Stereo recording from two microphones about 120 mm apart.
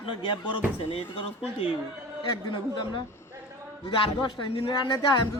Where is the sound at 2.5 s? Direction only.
40° left (ahead or behind).